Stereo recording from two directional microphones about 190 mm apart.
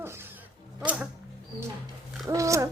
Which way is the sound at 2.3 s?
15° right (ahead or behind).